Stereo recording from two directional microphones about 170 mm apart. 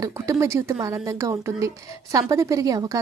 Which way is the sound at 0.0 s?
15° right (ahead or behind).